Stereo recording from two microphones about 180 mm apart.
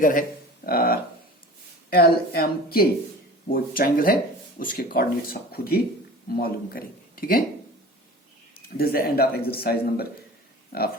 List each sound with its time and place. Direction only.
0.0 s speech: 50° left (ahead or behind)
8.5 s speech: 55° left (ahead or behind)